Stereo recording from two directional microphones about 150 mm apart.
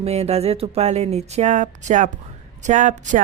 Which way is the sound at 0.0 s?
45° right (ahead or behind).